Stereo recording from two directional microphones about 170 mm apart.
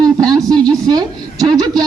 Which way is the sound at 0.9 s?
25° right (ahead or behind).